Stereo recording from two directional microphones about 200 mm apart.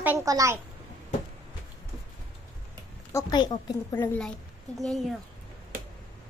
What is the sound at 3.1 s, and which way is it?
A woman's voice, 20° left (ahead or behind).